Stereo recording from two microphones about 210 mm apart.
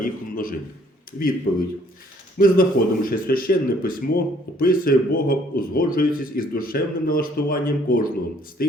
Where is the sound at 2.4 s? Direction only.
40° left (ahead or behind).